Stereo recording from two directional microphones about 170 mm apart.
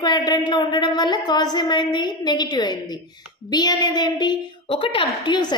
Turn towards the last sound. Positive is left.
turn(degrees=25)  # may be behind; listen again after turning